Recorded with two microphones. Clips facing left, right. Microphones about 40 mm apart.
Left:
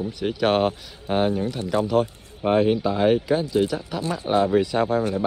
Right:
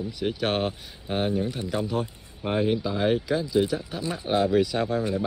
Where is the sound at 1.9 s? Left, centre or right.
Left.